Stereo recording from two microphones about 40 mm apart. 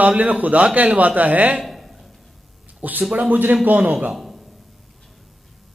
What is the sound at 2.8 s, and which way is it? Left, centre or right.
Speech, right.